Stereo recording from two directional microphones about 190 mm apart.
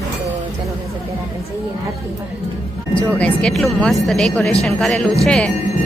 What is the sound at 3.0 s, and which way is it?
Speech, 5° left (ahead or behind).